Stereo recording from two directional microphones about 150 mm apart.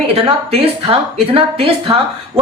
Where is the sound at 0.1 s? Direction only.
40° right (ahead or behind).